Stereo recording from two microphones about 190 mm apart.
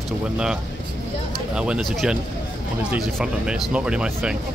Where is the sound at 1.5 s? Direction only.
5° right (ahead or behind).